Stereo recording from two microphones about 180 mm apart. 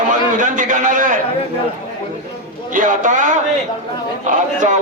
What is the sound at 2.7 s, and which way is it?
A man's voice, 45° right (ahead or behind).